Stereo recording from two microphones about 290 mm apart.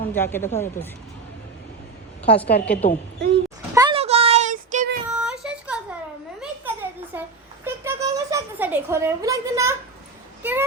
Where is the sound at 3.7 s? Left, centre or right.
Centre.